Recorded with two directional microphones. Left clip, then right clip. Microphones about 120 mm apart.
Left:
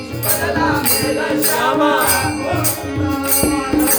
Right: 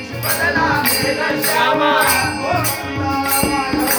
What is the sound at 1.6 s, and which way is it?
Music, 30° left (ahead or behind).